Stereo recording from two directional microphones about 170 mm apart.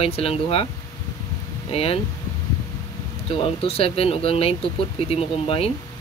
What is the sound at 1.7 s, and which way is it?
Speech, 35° left (ahead or behind).